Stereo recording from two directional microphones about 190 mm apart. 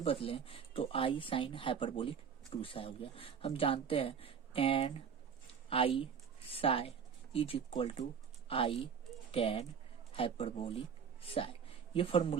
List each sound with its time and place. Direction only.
0.0 s speech: 30° left (ahead or behind)